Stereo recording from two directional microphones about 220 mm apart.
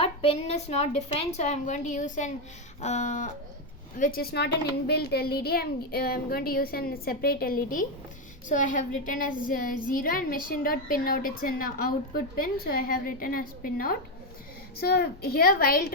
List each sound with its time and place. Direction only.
0.0 s a woman's voice: 25° left (ahead or behind)